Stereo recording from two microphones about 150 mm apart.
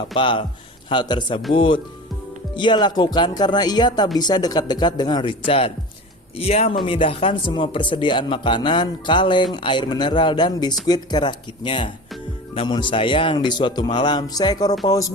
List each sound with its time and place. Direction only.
0.1 s speech: 35° left (ahead or behind)